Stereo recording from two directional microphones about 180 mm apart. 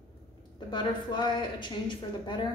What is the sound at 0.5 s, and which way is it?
A woman's voice, 25° left (ahead or behind).